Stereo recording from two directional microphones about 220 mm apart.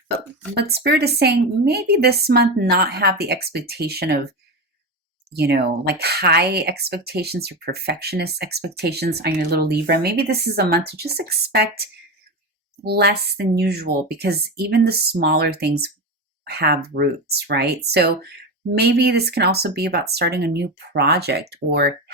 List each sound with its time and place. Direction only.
0.5 s speech: 50° right (ahead or behind)
5.3 s speech: 50° right (ahead or behind)
12.8 s speech: 45° right (ahead or behind)